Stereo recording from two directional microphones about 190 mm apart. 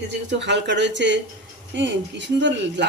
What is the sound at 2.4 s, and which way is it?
Speech, 70° right (ahead or behind).